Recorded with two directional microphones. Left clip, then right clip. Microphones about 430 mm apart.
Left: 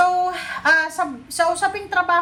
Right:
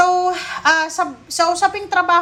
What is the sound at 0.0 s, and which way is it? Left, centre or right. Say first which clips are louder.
A woman's voice: right 3 dB; centre.